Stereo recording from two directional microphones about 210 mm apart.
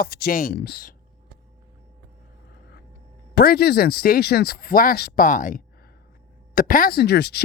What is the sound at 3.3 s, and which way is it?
Speech, 50° left (ahead or behind).